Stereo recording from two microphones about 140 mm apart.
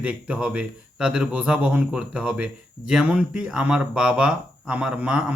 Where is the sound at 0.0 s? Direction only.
10° right (ahead or behind).